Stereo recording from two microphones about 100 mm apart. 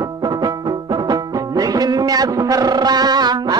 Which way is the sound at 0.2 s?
45° right (ahead or behind).